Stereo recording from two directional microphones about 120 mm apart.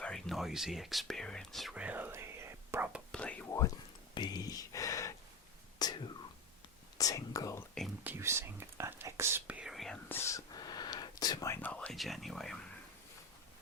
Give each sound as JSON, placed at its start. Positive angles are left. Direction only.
{"t": 0.0, "sound": "speech", "side_deg": 5}
{"t": 1.7, "sound": "whispering", "side_deg": -10}
{"t": 3.1, "sound": "whispering", "side_deg": 10}
{"t": 4.1, "sound": "a sound", "side_deg": 35}
{"t": 5.8, "sound": "whispering", "side_deg": 35}
{"t": 7.0, "sound": "speech", "side_deg": 30}
{"t": 8.0, "sound": "speech", "side_deg": -20}
{"t": 9.5, "sound": "whispering", "side_deg": -5}
{"t": 10.1, "sound": "whispering", "side_deg": 20}
{"t": 11.6, "sound": "speech", "side_deg": 10}
{"t": 11.9, "sound": "speech", "side_deg": 0}